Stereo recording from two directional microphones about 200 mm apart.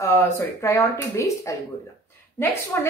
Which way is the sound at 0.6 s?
15° left (ahead or behind).